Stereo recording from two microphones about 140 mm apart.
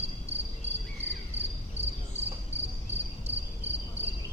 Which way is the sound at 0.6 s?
45° right (ahead or behind).